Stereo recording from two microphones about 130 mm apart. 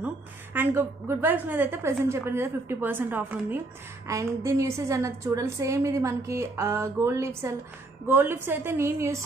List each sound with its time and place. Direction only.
0.0 s a woman's voice: 15° right (ahead or behind)
4.1 s a woman's voice: 25° right (ahead or behind)